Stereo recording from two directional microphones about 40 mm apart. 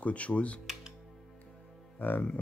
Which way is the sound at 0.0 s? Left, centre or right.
Left.